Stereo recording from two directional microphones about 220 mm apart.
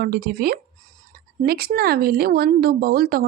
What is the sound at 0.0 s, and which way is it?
Speech, 45° right (ahead or behind).